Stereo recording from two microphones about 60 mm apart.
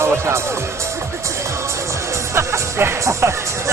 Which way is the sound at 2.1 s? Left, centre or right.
Right.